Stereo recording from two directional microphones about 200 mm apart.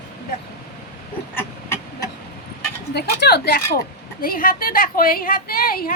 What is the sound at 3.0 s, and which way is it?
A woman's voice, 55° left (ahead or behind).